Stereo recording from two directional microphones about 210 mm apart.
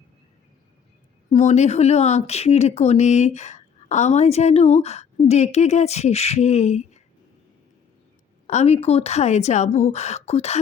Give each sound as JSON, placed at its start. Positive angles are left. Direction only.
{"t": 1.3, "sound": "speech", "side_deg": 35}
{"t": 8.4, "sound": "speech", "side_deg": 30}